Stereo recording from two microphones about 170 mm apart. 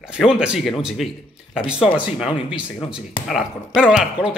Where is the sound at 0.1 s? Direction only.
5° right (ahead or behind).